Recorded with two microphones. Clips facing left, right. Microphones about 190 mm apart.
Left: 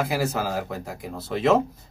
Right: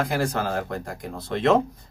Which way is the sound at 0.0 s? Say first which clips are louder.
Even; 5° left (ahead or behind).